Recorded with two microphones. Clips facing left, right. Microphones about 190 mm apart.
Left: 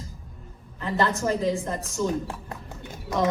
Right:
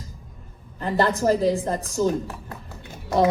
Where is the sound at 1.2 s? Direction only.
35° right (ahead or behind).